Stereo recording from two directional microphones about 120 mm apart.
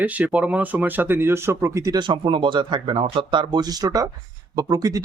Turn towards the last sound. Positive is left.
turn(degrees=-30)  # may be behind; listen again after turning